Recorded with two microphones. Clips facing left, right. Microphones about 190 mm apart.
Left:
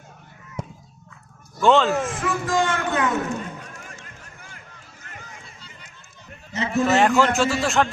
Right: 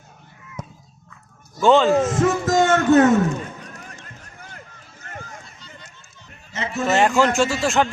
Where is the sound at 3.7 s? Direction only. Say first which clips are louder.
Right 1 dB; 40° right (ahead or behind).